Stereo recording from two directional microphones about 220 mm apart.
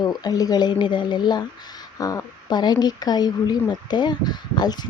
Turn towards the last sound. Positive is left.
turn(degrees=20)  # may be behind; listen again after turning